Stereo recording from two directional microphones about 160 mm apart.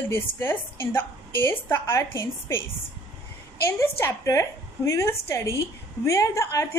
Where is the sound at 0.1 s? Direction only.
15° left (ahead or behind).